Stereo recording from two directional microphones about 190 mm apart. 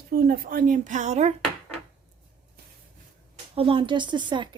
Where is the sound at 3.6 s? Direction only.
25° right (ahead or behind).